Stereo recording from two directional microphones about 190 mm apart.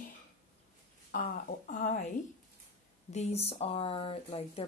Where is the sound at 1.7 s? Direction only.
45° left (ahead or behind).